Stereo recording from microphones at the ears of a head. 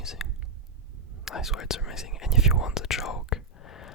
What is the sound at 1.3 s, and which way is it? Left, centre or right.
Speech, left.